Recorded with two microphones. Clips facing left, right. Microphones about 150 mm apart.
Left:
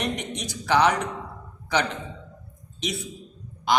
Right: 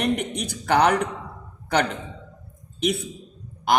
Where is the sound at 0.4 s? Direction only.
55° right (ahead or behind).